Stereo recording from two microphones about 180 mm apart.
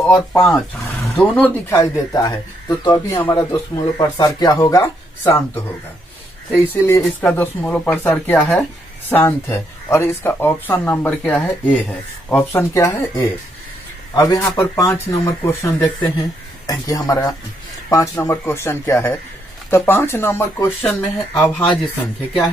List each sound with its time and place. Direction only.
0.0 s speech: 5° left (ahead or behind)